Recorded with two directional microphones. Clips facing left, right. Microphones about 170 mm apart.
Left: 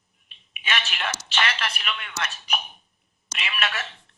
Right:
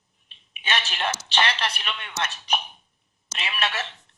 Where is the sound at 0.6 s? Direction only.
35° right (ahead or behind).